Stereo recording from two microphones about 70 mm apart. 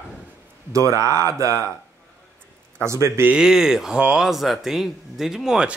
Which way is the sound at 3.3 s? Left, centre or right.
Centre.